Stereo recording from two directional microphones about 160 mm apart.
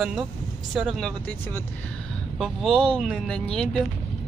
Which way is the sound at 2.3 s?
Centre (ahead or behind).